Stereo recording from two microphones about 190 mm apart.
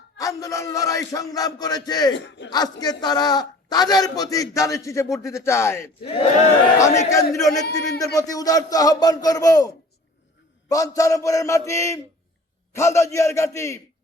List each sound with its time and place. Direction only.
0.2 s a man's voice: 15° left (ahead or behind)
5.1 s mantra: 15° left (ahead or behind)
6.0 s a man's voice: 30° left (ahead or behind)
6.7 s mantra: 15° left (ahead or behind)
7.5 s a man's voice: 20° left (ahead or behind)
10.7 s mantra: 15° left (ahead or behind)